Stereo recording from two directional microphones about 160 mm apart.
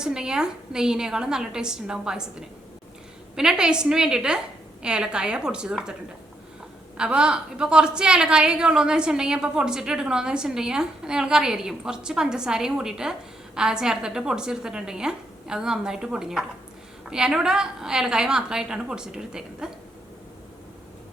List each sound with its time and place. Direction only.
0.0 s a woman's voice: 5° right (ahead or behind)
3.3 s a woman's voice: 5° right (ahead or behind)